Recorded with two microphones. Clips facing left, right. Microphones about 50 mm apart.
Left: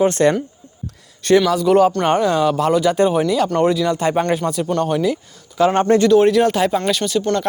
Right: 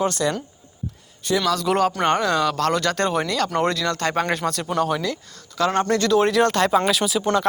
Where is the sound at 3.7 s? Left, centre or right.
Centre.